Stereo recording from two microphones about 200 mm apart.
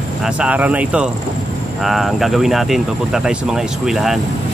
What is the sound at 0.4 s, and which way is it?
Speech, 5° right (ahead or behind).